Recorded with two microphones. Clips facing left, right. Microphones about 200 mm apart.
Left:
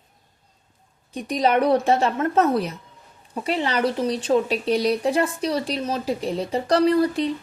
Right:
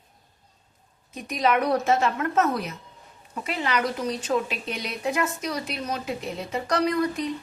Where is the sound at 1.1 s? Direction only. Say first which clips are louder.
Left 3 dB; 30° left (ahead or behind).